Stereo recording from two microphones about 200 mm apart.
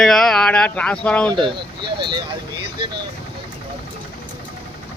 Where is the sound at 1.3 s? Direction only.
25° right (ahead or behind).